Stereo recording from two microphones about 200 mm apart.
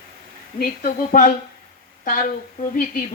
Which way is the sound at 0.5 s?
45° left (ahead or behind).